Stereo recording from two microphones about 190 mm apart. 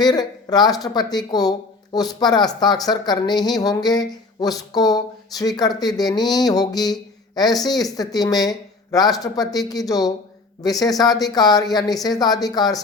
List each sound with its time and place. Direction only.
0.0 s speech: 20° left (ahead or behind)